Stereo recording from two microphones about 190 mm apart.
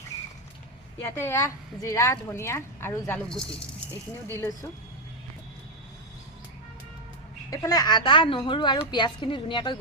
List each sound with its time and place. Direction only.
1.1 s a woman's voice: 15° left (ahead or behind)
4.3 s a woman's voice: 15° left (ahead or behind)
7.5 s speech: 20° left (ahead or behind)